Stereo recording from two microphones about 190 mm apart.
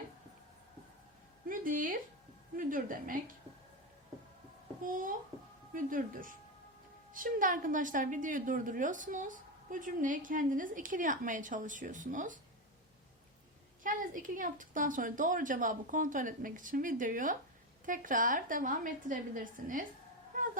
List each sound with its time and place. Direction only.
1.5 s a sound: 45° right (ahead or behind)
2.6 s a woman's voice: 45° right (ahead or behind)
4.8 s a woman's voice: 45° right (ahead or behind)
13.8 s a woman's voice: 45° right (ahead or behind)